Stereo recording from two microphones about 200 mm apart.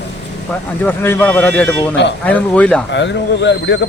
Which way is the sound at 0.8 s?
10° left (ahead or behind).